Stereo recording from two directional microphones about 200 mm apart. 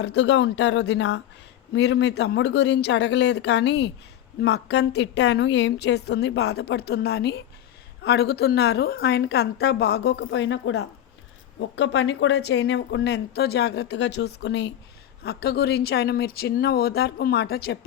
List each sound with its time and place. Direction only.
0.0 s speech: 60° left (ahead or behind); by 10.8 s 80° left
11.6 s speech: 60° left (ahead or behind)